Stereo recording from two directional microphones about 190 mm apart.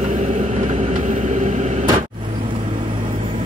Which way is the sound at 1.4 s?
35° right (ahead or behind).